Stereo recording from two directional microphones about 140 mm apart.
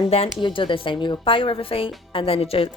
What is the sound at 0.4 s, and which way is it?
Speech, 35° left (ahead or behind).